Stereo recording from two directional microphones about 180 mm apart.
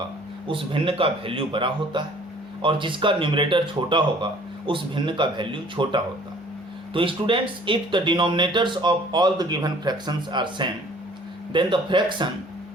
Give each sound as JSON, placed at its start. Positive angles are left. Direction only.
{"t": 0.4, "sound": "speech", "side_deg": -30}